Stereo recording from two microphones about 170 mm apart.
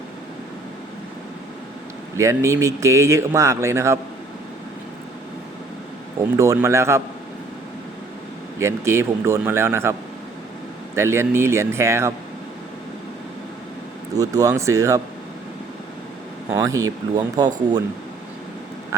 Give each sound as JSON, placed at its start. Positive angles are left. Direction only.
{"t": 2.1, "sound": "speech", "side_deg": -15}
{"t": 6.1, "sound": "speech", "side_deg": -15}
{"t": 8.5, "sound": "speech", "side_deg": -15}
{"t": 10.9, "sound": "speech", "side_deg": -15}
{"t": 14.2, "sound": "speech", "side_deg": -20}
{"t": 16.5, "sound": "speech", "side_deg": -20}